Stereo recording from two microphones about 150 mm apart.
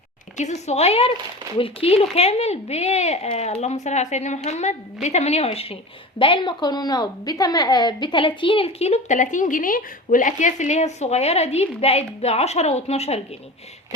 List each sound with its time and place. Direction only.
0.3 s a woman's voice: 50° left (ahead or behind)